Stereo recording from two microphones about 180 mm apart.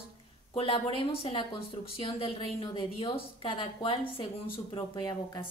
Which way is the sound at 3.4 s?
30° left (ahead or behind).